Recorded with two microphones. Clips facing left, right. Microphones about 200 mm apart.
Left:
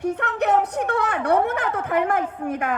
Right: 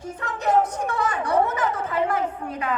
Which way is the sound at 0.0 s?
65° left (ahead or behind).